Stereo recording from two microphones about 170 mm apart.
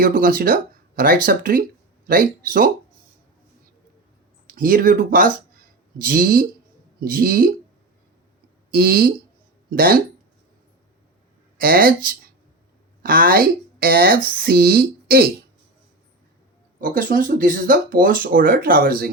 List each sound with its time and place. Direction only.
0.0 s speech: 55° right (ahead or behind)
4.4 s speech: 55° right (ahead or behind)
5.5 s a sound: 55° right (ahead or behind)
7.0 s speech: 55° right (ahead or behind)
8.7 s speech: 65° right (ahead or behind)
11.5 s speech: 60° right (ahead or behind)
16.8 s speech: 55° right (ahead or behind)